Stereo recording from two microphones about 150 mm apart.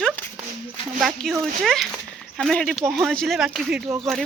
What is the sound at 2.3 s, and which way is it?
Speech, 5° left (ahead or behind).